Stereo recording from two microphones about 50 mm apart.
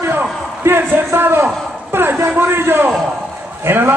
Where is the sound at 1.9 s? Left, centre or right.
Right.